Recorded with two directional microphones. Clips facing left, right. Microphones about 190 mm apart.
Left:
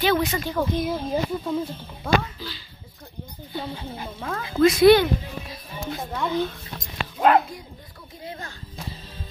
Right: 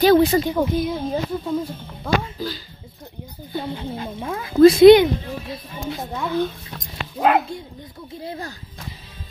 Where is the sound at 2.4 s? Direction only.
45° right (ahead or behind).